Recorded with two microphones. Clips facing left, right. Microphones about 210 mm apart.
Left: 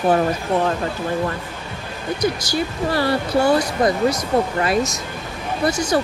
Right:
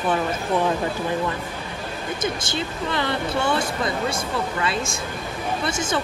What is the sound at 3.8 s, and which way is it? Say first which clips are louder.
Speech: left 8 dB; 45° left (ahead or behind).